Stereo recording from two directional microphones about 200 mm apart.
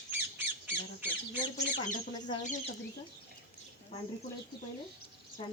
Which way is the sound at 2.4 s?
40° left (ahead or behind).